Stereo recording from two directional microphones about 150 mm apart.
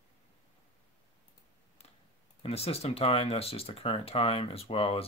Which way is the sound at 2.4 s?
40° left (ahead or behind).